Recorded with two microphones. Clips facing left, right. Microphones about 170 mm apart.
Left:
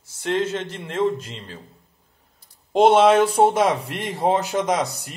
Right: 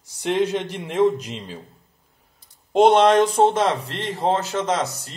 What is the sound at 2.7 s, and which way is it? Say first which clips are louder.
Speech: even; centre (ahead or behind).